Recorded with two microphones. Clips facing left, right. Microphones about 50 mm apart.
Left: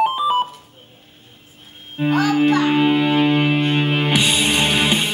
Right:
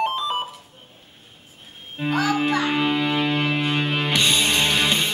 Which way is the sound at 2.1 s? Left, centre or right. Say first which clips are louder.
Left 4 dB; centre.